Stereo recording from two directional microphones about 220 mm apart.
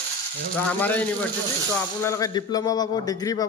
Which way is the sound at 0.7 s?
10° left (ahead or behind).